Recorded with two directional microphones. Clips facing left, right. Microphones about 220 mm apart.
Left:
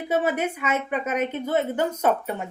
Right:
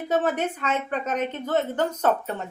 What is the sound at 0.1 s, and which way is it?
A woman's voice, 10° left (ahead or behind).